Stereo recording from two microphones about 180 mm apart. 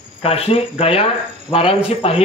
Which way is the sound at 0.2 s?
30° left (ahead or behind).